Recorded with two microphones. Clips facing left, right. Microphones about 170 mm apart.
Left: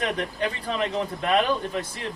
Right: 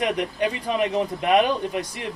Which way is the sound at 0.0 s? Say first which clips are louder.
Right 3 dB; 15° right (ahead or behind).